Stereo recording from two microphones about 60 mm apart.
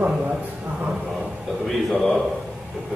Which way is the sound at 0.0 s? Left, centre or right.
Right.